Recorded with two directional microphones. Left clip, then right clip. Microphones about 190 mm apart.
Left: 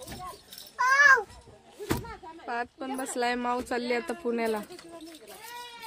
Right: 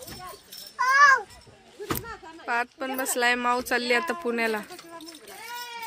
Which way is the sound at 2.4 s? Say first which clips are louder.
Right 6 dB; centre (ahead or behind).